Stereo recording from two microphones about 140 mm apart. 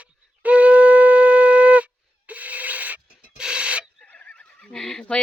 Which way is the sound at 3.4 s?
5° right (ahead or behind).